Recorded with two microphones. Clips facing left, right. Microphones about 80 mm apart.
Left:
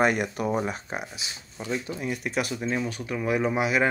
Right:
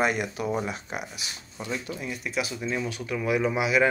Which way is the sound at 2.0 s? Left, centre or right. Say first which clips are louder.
Left 2 dB; left.